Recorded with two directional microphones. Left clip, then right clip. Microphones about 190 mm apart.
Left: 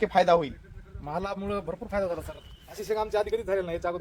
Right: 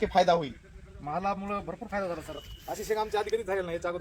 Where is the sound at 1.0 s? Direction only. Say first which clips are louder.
Right 1 dB; 55° left (ahead or behind).